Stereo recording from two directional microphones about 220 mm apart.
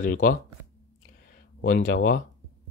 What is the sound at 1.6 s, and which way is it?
Speech, 40° left (ahead or behind).